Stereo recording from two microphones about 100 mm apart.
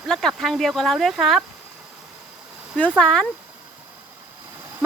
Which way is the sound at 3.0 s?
5° left (ahead or behind).